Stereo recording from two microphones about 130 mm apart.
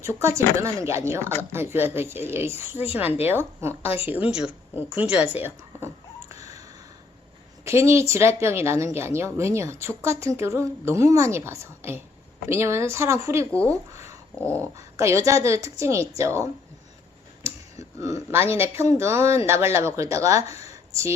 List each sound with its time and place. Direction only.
0.0 s a woman's voice: 20° right (ahead or behind); by 4.5 s 5° right (ahead or behind)
4.7 s a sound: 10° right (ahead or behind)
7.6 s a woman's voice: 20° right (ahead or behind)
17.7 s a woman's voice: 25° right (ahead or behind)